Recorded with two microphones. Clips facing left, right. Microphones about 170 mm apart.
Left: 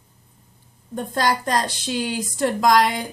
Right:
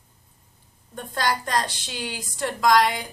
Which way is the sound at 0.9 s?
40° left (ahead or behind).